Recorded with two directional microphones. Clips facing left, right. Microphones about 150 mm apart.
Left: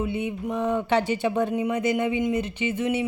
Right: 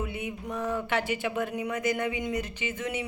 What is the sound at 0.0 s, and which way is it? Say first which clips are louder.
Speech: left 7 dB; 25° left (ahead or behind).